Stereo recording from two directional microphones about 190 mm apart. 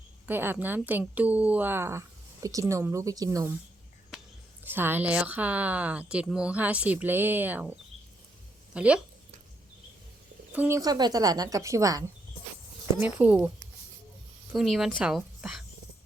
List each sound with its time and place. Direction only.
0.3 s a woman's voice: 10° right (ahead or behind)
4.6 s a woman's voice: 10° right (ahead or behind)
8.7 s speech: 5° right (ahead or behind)
10.5 s a woman's voice: 10° right (ahead or behind)
14.5 s speech: centre (ahead or behind)